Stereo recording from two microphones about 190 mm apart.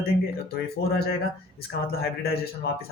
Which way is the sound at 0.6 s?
55° left (ahead or behind).